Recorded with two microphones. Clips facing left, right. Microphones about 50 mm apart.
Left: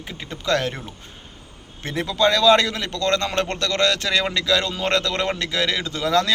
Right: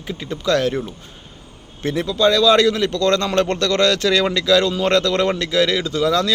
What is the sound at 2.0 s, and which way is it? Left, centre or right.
Speech, left.